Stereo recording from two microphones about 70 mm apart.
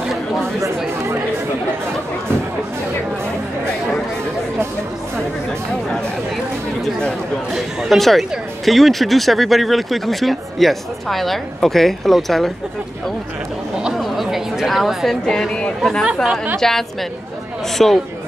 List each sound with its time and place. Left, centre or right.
6.8 s chatter: centre
7.5 s speech: centre
13.9 s chatter: centre
15.2 s speech: centre